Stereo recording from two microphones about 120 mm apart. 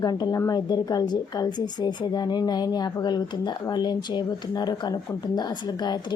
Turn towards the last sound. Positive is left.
turn(degrees=35)  # may be behind; listen again after turning